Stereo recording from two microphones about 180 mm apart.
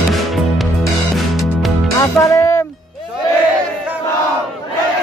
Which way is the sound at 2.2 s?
15° left (ahead or behind).